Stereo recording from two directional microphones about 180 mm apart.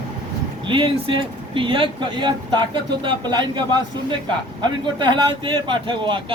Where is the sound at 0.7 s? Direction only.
30° right (ahead or behind).